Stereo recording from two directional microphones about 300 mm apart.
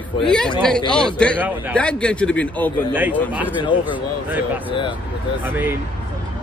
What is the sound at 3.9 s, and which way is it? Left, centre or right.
Speech, centre.